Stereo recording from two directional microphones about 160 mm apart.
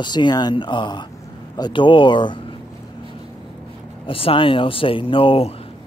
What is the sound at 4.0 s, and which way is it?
Speech, 35° left (ahead or behind).